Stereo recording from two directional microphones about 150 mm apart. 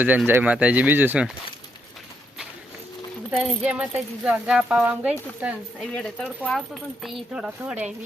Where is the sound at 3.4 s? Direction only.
5° right (ahead or behind).